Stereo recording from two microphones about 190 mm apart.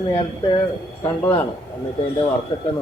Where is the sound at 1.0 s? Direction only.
10° left (ahead or behind).